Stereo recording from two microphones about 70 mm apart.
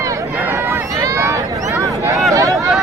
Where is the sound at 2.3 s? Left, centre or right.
Right.